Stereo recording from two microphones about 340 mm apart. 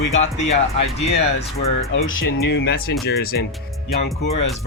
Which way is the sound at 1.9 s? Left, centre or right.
Left.